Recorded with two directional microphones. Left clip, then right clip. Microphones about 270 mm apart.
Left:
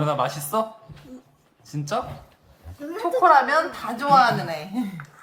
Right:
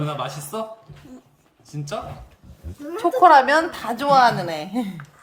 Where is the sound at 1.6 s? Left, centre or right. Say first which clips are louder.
Left 4 dB; centre.